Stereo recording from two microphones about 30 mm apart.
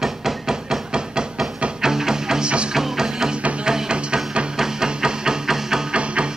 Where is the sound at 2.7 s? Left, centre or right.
Centre.